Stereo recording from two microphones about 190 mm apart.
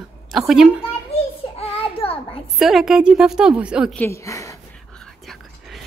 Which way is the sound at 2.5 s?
Centre (ahead or behind).